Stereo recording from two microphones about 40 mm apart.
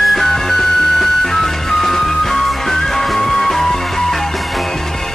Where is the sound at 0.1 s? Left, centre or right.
Centre.